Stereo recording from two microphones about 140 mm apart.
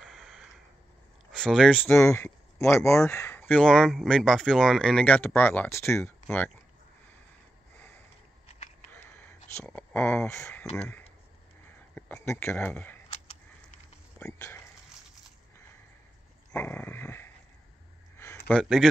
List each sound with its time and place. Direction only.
0.0 s a sound: centre (ahead or behind)
1.3 s speech: 5° left (ahead or behind)
9.7 s speech: 10° left (ahead or behind)
12.3 s speech: 15° left (ahead or behind)
16.5 s speech: 10° left (ahead or behind)
18.5 s speech: 5° left (ahead or behind)